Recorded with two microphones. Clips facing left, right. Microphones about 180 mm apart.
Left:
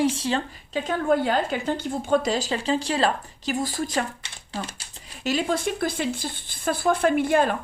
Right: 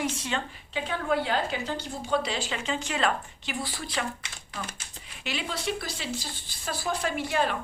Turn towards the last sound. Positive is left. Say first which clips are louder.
# left 8 dB
turn(degrees=50)  # may be behind; listen again after turning